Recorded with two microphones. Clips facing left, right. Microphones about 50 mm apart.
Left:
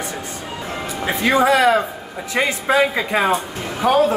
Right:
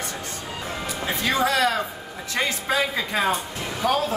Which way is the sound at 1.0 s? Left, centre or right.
Left.